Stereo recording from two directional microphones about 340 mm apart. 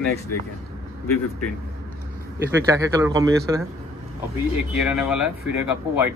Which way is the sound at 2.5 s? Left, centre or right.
Centre.